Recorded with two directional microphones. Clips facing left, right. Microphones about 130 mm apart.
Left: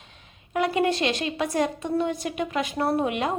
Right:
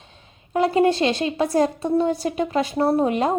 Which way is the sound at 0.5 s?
30° right (ahead or behind).